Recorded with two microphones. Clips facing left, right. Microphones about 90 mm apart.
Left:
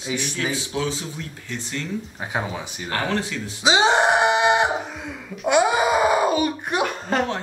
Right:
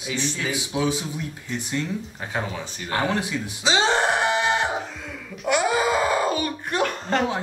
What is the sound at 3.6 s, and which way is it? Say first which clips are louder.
Wail: left 4 dB; 15° left (ahead or behind).